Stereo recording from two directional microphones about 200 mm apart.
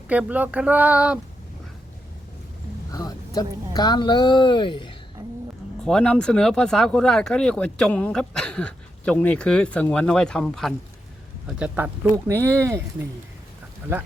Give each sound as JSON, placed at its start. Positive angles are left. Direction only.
{"t": 0.1, "sound": "speech", "side_deg": -5}
{"t": 2.9, "sound": "speech", "side_deg": 20}
{"t": 5.8, "sound": "speech", "side_deg": 5}
{"t": 13.9, "sound": "speech", "side_deg": -10}